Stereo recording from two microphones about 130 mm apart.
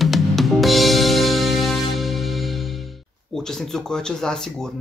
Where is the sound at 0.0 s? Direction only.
Centre (ahead or behind).